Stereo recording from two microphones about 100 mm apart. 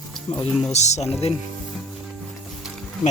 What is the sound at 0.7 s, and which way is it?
Speech, 90° left.